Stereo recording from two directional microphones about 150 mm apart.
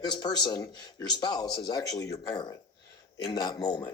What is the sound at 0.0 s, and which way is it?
A man's voice, 30° left (ahead or behind).